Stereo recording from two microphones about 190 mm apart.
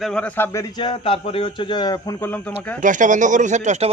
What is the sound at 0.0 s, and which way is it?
A man's voice, 5° left (ahead or behind).